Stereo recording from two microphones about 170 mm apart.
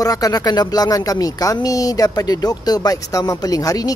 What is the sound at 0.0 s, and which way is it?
Speech, 20° left (ahead or behind).